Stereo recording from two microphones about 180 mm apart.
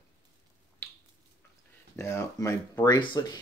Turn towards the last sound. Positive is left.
turn(degrees=25)  # may be behind; listen again after turning